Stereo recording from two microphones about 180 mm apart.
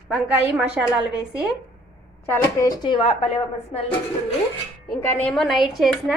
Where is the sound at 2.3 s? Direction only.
20° left (ahead or behind).